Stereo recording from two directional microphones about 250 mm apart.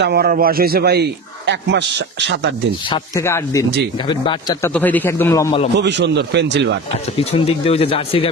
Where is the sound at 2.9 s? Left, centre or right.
Centre.